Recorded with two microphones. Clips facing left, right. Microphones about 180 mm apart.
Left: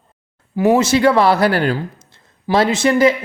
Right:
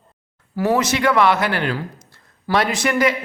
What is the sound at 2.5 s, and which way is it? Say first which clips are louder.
Speech: left 5 dB; 25° left (ahead or behind).